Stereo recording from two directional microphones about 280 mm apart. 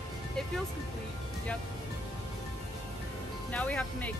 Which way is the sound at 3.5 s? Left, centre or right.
Centre.